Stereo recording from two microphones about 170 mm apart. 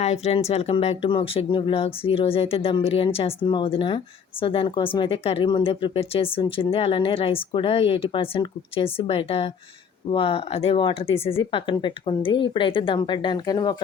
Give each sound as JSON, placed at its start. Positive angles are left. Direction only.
{"t": 0.0, "sound": "speech", "side_deg": 40}